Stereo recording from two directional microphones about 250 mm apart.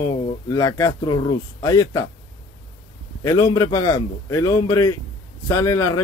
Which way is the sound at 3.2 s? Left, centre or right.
Centre.